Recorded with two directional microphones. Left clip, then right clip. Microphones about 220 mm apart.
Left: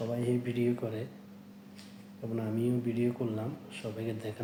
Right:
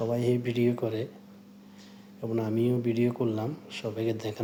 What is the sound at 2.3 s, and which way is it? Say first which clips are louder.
A man's voice: right 5 dB; 45° right (ahead or behind).